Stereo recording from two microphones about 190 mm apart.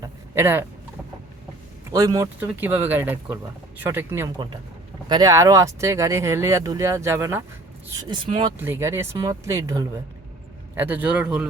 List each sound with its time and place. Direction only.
0.0 s vehicle: 15° right (ahead or behind)
1.9 s speech: 20° right (ahead or behind)
8.1 s speech: 25° right (ahead or behind)
8.5 s speech: 10° right (ahead or behind)